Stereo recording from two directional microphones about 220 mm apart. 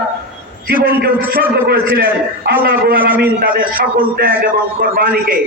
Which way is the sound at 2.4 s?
45° right (ahead or behind).